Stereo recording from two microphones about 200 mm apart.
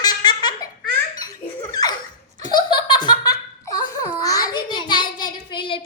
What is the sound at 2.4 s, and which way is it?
Laughter, 20° left (ahead or behind).